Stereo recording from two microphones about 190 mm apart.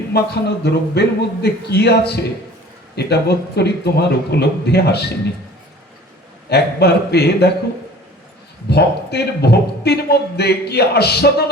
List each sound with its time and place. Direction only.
0.1 s a man's voice: 60° left (ahead or behind)
6.5 s a man's voice: 60° left (ahead or behind)
8.7 s a man's voice: 60° left (ahead or behind)